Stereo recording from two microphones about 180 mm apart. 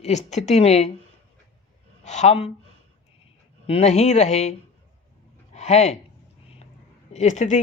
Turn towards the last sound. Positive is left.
turn(degrees=40)  # may be behind; listen again after turning